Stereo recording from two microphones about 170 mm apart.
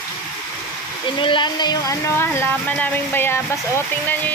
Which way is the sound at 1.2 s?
30° left (ahead or behind).